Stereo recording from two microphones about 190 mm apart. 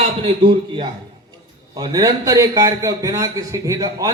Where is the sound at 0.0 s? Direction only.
25° right (ahead or behind).